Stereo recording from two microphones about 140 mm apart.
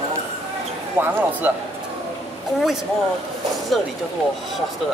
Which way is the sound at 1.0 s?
15° right (ahead or behind).